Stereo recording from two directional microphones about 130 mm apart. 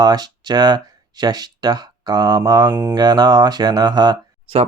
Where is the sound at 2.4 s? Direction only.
30° right (ahead or behind).